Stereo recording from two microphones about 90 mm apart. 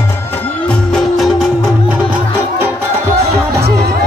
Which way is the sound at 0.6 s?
5° left (ahead or behind).